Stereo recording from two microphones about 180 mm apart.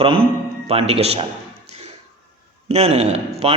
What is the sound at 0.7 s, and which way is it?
Speech, 35° right (ahead or behind).